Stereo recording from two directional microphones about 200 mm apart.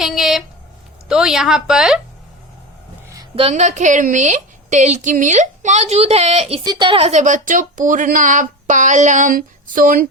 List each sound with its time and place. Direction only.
0.0 s a sound: centre (ahead or behind)
1.0 s a woman's voice: 5° right (ahead or behind)
3.3 s speech: 35° right (ahead or behind)